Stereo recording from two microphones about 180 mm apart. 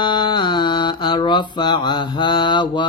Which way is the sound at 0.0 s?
25° left (ahead or behind).